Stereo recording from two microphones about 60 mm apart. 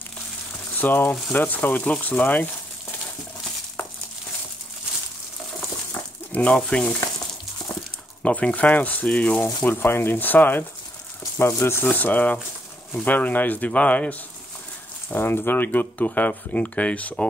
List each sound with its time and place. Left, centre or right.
0.7 s speech: left
6.3 s speech: left
8.2 s speech: left
9.7 s speech: left
11.8 s speech: left
15.0 s speech: left